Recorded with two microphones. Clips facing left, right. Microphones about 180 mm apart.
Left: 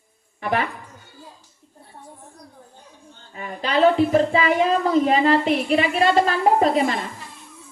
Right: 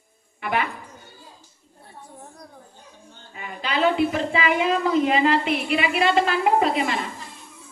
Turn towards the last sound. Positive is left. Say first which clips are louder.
# left 3 dB
turn(degrees=40)  # may be behind; listen again after turning